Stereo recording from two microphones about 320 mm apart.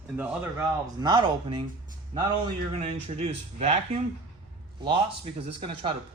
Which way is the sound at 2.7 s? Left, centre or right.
Centre.